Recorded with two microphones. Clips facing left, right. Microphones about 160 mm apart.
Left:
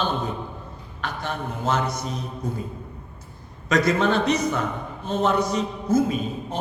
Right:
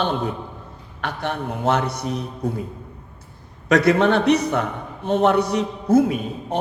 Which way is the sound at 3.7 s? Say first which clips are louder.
Right 4 dB; 65° right (ahead or behind).